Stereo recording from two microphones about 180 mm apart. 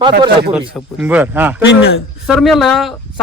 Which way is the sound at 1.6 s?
90° left.